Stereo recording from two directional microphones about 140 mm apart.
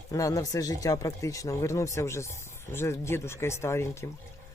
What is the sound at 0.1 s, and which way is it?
Speech, 25° left (ahead or behind).